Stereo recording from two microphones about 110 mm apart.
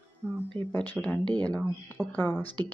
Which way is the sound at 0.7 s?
15° left (ahead or behind).